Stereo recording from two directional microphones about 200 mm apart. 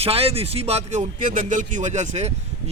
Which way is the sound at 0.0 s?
30° right (ahead or behind).